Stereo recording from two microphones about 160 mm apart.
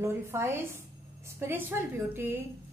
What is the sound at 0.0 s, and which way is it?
A woman's voice, 15° right (ahead or behind).